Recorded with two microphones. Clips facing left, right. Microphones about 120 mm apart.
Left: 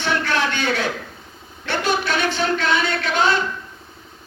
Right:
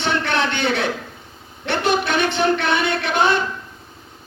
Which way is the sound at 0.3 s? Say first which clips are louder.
Right 1 dB; 65° right (ahead or behind).